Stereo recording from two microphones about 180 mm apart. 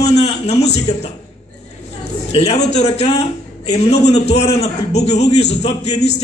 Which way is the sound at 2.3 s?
35° left (ahead or behind).